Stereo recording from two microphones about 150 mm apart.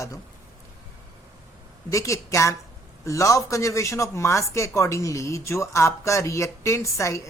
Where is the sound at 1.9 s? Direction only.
20° left (ahead or behind).